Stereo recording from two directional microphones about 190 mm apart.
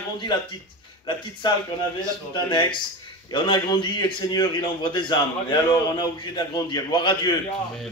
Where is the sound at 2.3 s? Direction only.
25° left (ahead or behind).